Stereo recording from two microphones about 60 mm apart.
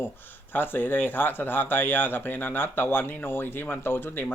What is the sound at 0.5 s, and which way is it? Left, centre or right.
Speech, left.